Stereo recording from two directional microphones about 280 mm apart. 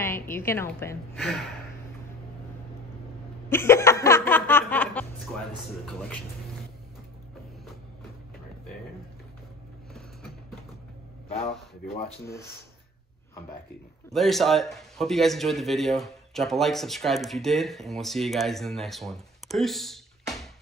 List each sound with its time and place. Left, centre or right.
0.0 s a woman's voice: centre
3.4 s laughter: centre
5.9 s speech: centre
12.3 s a woman's voice: centre
14.1 s speech: centre